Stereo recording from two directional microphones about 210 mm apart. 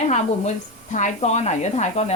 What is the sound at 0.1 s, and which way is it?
Speech, 35° left (ahead or behind).